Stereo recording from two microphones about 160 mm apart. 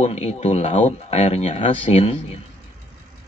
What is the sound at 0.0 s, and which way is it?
Speech, 45° left (ahead or behind).